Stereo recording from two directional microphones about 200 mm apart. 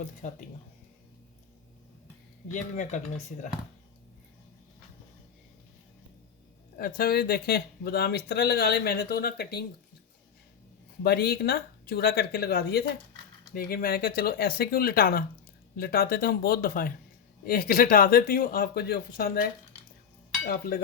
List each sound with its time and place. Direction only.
0.2 s speech: 35° left (ahead or behind)
2.5 s speech: 40° left (ahead or behind)
6.7 s speech: 50° left (ahead or behind)
11.0 s speech: 55° left (ahead or behind)
20.5 s speech: 50° left (ahead or behind)